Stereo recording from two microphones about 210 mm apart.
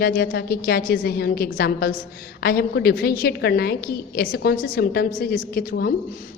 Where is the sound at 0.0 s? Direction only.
50° left (ahead or behind).